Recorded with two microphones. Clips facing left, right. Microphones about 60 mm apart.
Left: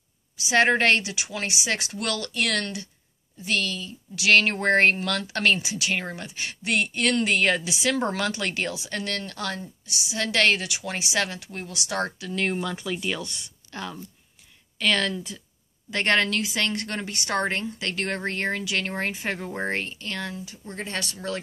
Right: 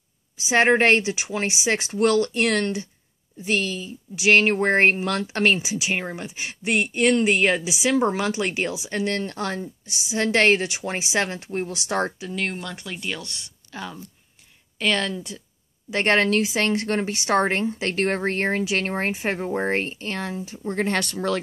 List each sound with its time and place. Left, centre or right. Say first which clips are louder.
0.5 s speech: right 3 dB; right
12.4 s speech: left 4 dB; centre
15.9 s speech: right 3 dB; right
20.7 s speech: right 8 dB; right